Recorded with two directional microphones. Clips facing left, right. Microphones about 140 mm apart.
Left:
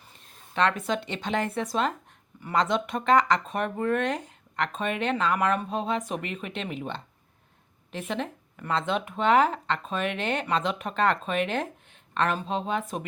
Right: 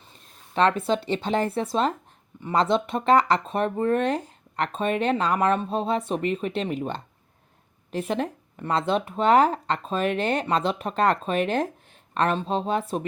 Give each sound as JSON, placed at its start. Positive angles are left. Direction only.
{"t": 0.5, "sound": "speech", "side_deg": -30}